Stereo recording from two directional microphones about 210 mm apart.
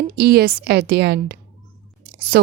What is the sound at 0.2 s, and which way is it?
A woman's voice, 50° right (ahead or behind).